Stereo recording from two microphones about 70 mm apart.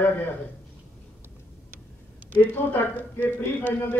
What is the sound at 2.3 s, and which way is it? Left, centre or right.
A man's voice, left.